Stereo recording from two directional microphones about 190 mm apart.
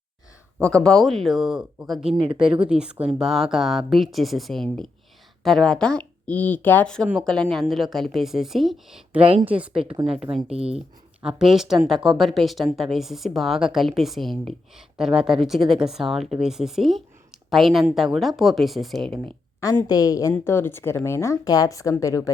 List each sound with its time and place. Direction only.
0.6 s speech: 5° left (ahead or behind)
2.0 s speech: 30° right (ahead or behind)
2.4 s speech: 5° right (ahead or behind)
9.2 s speech: 30° right (ahead or behind)
10.7 s speech: 5° right (ahead or behind)
19.9 s a woman's voice: 20° left (ahead or behind)